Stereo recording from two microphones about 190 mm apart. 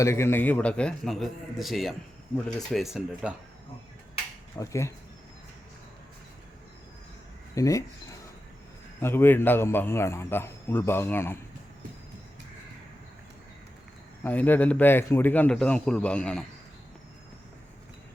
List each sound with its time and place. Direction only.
0.0 s a man's voice: 15° left (ahead or behind); by 3.3 s 5° right (ahead or behind)
4.5 s a man's voice: 15° left (ahead or behind)
7.5 s a man's voice: 15° left (ahead or behind)
9.0 s a man's voice: 10° left (ahead or behind)
14.3 s a man's voice: 10° left (ahead or behind)